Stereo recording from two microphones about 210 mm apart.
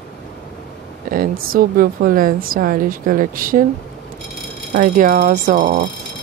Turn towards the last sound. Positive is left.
turn(degrees=-35)  # may be behind; listen again after turning